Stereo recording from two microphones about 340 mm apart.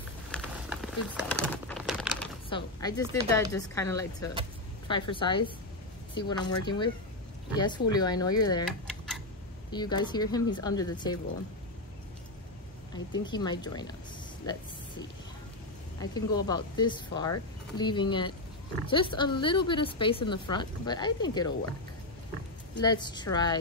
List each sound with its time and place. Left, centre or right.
0.3 s crumpling: centre
2.5 s a woman's voice: centre
8.6 s tick-tock: centre
9.7 s a woman's voice: centre
12.9 s a woman's voice: centre
14.4 s a sound: centre
16.0 s a woman's voice: centre
22.8 s a woman's voice: centre